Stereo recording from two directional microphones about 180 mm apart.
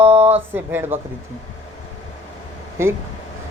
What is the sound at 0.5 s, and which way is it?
Speech, 10° right (ahead or behind).